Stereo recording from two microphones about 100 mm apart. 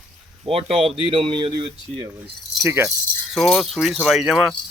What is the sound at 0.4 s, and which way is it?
Speech, 75° right (ahead or behind).